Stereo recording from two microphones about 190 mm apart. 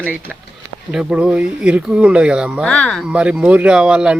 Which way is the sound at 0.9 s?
5° right (ahead or behind).